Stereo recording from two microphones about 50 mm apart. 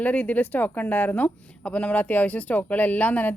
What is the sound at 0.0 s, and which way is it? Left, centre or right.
A woman's voice, left.